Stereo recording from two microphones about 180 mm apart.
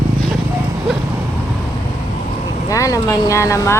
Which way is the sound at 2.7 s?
20° left (ahead or behind).